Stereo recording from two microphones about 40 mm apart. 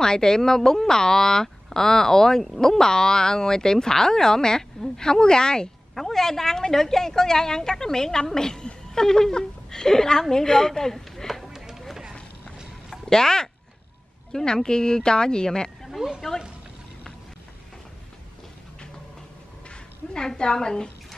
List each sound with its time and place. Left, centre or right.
0.0 s a woman's voice: centre
11.4 s run: centre
13.0 s speech: centre
19.7 s a sound: left
20.3 s speech: centre